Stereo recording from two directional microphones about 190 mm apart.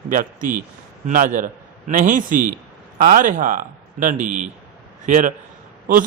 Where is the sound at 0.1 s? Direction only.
45° right (ahead or behind).